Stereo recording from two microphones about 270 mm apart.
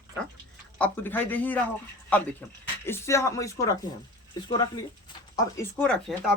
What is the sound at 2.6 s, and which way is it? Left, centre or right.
Speech, centre.